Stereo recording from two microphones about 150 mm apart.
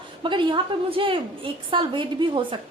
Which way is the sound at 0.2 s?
30° right (ahead or behind).